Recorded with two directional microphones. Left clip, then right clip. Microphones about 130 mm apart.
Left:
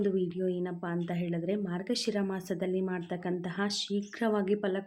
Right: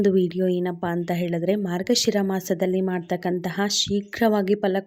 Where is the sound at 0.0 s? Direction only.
70° right (ahead or behind).